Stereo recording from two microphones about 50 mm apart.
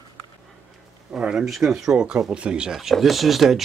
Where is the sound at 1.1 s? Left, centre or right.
Centre.